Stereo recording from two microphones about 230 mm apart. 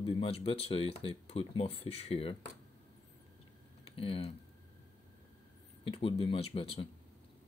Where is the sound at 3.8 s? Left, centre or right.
Left.